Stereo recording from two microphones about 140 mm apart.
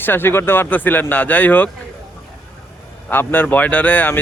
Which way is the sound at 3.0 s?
15° left (ahead or behind).